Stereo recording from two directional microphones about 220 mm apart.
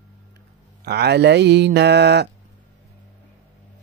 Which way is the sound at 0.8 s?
50° right (ahead or behind).